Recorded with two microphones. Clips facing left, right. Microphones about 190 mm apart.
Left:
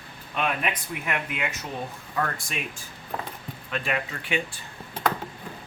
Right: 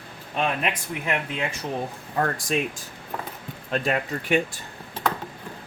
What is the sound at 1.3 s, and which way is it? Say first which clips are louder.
Speech: right 4 dB; 30° right (ahead or behind).